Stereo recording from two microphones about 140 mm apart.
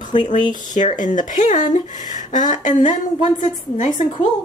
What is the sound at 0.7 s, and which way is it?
Speech, 65° left (ahead or behind).